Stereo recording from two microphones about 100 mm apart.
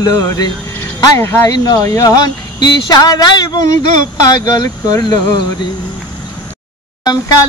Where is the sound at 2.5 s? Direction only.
40° left (ahead or behind).